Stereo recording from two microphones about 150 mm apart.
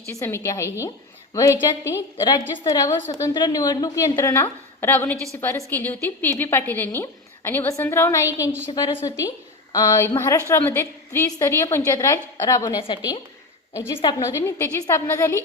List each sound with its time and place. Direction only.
0.1 s a woman's voice: 20° left (ahead or behind)
8.7 s a woman's voice: 30° left (ahead or behind)